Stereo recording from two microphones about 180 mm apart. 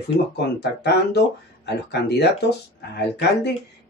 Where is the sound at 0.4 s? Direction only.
65° left (ahead or behind).